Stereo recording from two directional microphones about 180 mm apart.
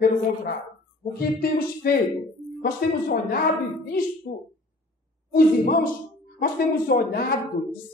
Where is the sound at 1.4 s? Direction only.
55° left (ahead or behind).